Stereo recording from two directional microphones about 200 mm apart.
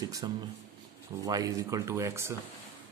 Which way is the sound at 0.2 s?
20° right (ahead or behind).